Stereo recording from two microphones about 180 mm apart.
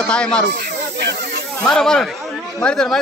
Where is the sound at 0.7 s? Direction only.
65° right (ahead or behind).